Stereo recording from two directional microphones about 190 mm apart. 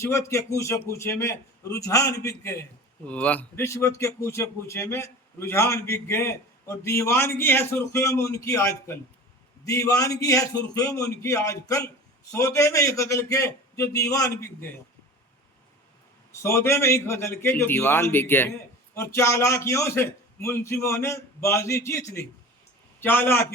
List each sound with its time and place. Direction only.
0.0 s a man's voice: 15° left (ahead or behind)
16.3 s a man's voice: 15° left (ahead or behind)